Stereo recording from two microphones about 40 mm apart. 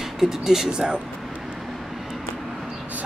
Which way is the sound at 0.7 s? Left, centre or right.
Right.